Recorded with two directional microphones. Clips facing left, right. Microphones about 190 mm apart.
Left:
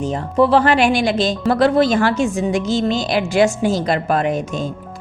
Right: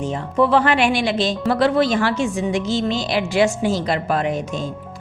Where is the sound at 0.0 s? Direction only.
40° left (ahead or behind).